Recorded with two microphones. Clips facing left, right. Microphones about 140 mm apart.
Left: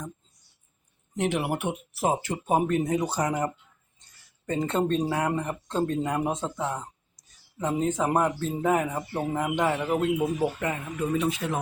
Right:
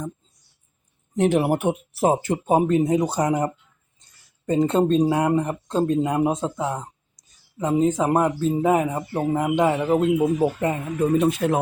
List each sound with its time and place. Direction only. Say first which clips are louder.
1.1 s speech: right 8 dB; 35° right (ahead or behind)
2.2 s speech: right 5 dB; 25° right (ahead or behind)
11.0 s speech: right 7 dB; 45° right (ahead or behind)